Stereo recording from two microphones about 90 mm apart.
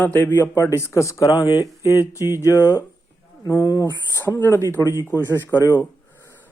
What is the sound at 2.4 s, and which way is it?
A man's voice, 35° left (ahead or behind).